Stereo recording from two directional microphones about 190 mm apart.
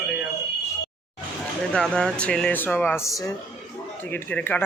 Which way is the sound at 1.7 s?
5° left (ahead or behind).